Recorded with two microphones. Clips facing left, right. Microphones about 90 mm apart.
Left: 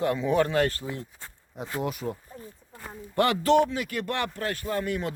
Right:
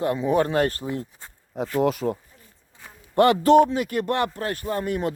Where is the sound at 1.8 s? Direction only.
90° right.